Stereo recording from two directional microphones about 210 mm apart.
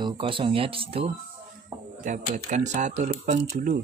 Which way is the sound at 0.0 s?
25° right (ahead or behind).